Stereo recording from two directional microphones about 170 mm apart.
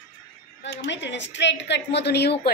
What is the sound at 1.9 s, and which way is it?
Speech, 75° left (ahead or behind).